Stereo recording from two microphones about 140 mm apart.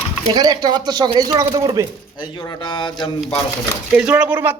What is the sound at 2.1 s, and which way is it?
Speech, 35° left (ahead or behind).